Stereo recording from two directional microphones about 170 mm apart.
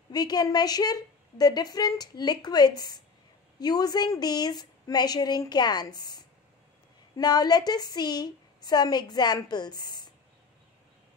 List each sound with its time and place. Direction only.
0.1 s a woman's voice: 25° left (ahead or behind)